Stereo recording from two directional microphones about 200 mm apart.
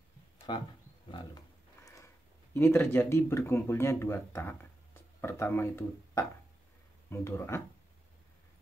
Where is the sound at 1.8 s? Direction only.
15° left (ahead or behind).